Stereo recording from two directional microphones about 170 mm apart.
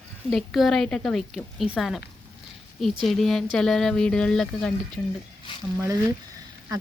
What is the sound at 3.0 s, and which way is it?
Speech, centre (ahead or behind).